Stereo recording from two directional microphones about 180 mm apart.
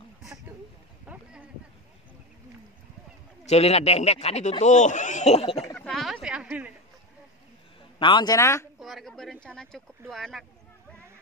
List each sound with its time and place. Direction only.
1.0 s a sound: 10° right (ahead or behind)
3.4 s speech: 35° left (ahead or behind)
5.8 s a sound: centre (ahead or behind)
6.2 s a woman's voice: 5° right (ahead or behind)
8.0 s a man's voice: 25° left (ahead or behind)
8.7 s speech: centre (ahead or behind)